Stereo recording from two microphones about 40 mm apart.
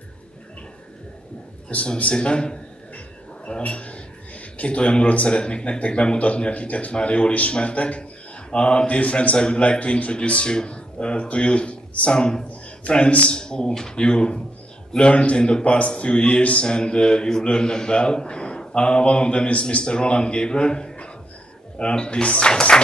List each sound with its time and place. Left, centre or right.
2.1 s speech: left
3.4 s a sound: left
5.1 s speech: left
12.1 s a man's voice: centre
13.4 s speech: centre
22.5 s music: left